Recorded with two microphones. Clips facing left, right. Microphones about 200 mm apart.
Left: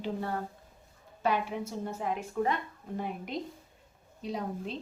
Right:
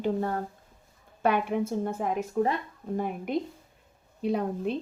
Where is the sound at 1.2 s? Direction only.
55° right (ahead or behind).